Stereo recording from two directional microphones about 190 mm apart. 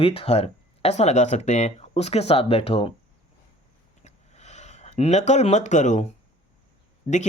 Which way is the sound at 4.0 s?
35° left (ahead or behind).